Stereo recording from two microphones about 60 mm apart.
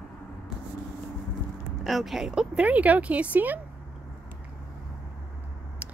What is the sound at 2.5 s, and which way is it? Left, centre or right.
Speech, right.